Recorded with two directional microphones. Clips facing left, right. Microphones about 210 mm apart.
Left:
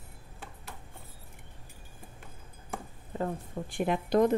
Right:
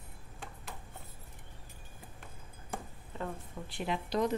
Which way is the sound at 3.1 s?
40° left (ahead or behind).